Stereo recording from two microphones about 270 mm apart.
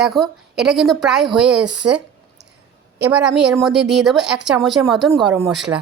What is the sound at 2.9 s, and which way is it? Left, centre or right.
Speech, centre.